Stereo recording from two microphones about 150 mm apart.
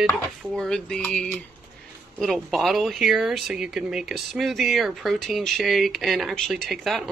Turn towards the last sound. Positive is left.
turn(degrees=0)  # may be behind; listen again after turning